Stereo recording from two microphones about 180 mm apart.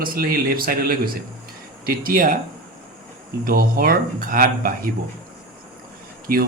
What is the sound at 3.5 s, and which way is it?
Speech, 55° right (ahead or behind).